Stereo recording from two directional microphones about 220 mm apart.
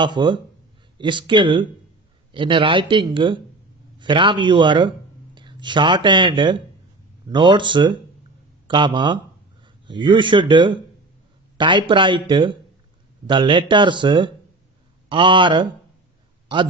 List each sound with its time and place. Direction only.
0.0 s a man's voice: 20° right (ahead or behind)